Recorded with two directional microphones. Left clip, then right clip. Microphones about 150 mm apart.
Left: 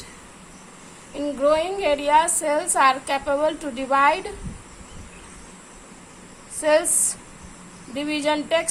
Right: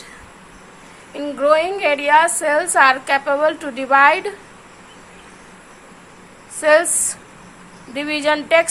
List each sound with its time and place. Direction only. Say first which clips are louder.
1.1 s a woman's voice: right 5 dB; 20° right (ahead or behind)
6.6 s a woman's voice: right 5 dB; 20° right (ahead or behind)